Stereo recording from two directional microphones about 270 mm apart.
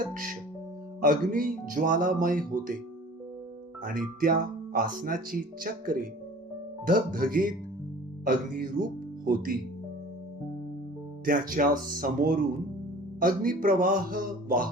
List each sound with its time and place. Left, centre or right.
1.0 s speech: right
4.2 s speech: right
11.3 s speech: right